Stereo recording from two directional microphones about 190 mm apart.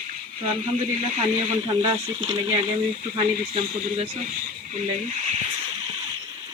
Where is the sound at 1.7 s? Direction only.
25° right (ahead or behind).